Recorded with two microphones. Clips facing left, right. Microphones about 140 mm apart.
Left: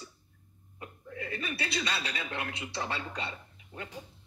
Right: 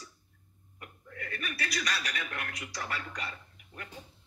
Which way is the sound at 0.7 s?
20° left (ahead or behind).